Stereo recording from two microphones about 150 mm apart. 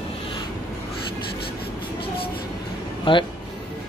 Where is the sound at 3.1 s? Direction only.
35° left (ahead or behind).